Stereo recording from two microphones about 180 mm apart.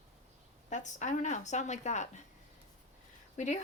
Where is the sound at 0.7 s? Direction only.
40° left (ahead or behind).